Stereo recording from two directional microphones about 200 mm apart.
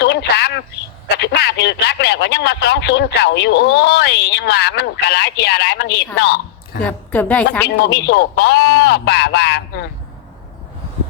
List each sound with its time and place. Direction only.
0.0 s a sound: 55° left (ahead or behind)
1.0 s a man's voice: 55° left (ahead or behind)
6.8 s a woman's voice: 5° left (ahead or behind)
7.9 s a man's voice: 55° left (ahead or behind)